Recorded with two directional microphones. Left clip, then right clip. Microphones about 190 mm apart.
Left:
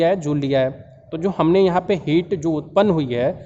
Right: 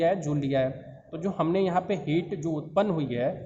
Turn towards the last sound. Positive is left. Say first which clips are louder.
# left 9 dB
turn(degrees=50)  # may be behind; listen again after turning